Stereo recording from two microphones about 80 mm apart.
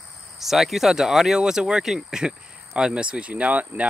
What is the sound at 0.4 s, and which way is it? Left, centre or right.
Speech, centre.